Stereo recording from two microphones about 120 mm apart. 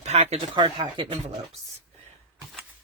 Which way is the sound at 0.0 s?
65° right (ahead or behind).